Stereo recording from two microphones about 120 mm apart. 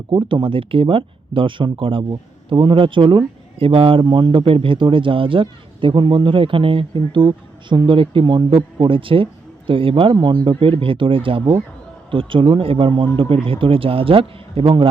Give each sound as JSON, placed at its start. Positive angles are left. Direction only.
{"t": 0.1, "sound": "speech", "side_deg": -40}